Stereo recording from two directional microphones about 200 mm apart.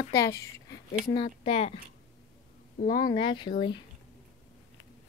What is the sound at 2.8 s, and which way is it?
Speech, 45° left (ahead or behind).